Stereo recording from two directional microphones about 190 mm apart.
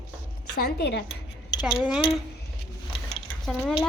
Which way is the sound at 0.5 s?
55° left (ahead or behind).